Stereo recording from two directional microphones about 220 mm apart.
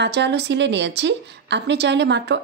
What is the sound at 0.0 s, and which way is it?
A woman's voice, 50° right (ahead or behind).